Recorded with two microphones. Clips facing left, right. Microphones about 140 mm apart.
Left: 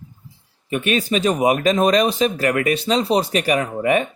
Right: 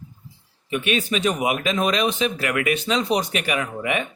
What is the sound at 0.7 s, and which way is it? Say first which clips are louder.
Speech: left 3 dB; 40° left (ahead or behind).